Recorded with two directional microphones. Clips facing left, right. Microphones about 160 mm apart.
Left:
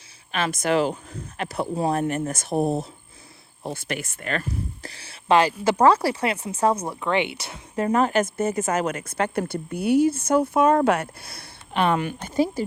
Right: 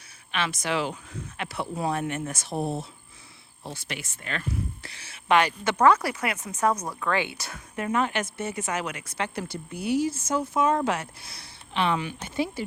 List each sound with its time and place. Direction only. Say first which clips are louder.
0.3 s speech: left 5 dB; 40° left (ahead or behind); by 7.9 s 25° left (ahead or behind)
7.9 s speech: left 6 dB; 40° left (ahead or behind)